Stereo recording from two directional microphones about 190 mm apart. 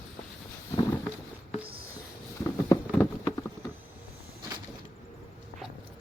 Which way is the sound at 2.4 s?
15° left (ahead or behind).